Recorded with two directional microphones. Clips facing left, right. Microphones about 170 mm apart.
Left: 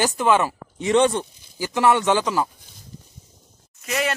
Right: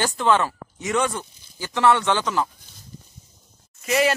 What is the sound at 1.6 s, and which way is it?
Speech, 15° left (ahead or behind).